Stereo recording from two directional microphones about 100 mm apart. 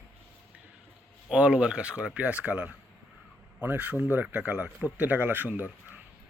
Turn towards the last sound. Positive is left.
turn(degrees=-15)  # may be behind; listen again after turning